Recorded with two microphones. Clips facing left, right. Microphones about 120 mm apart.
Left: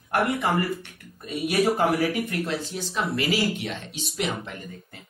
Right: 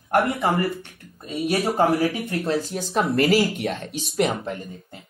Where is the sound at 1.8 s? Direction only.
30° right (ahead or behind); by 4.6 s 45° right (ahead or behind).